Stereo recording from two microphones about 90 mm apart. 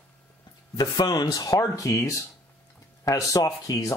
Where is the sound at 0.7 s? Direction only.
50° left (ahead or behind).